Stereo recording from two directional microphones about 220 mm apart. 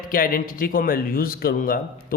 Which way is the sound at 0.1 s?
40° left (ahead or behind).